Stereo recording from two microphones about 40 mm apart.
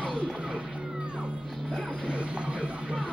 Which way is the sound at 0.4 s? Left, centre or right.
Right.